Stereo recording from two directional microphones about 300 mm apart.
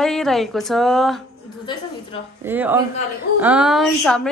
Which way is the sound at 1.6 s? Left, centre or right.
Centre.